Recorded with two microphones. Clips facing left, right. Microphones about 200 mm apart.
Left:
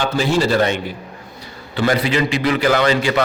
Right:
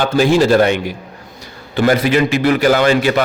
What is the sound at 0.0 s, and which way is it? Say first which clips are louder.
Speech: right 5 dB; 55° right (ahead or behind).